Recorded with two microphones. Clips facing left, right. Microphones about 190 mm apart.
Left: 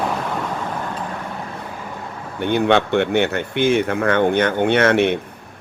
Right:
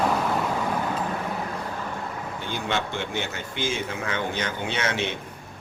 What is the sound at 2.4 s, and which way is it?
Speech, 60° left (ahead or behind).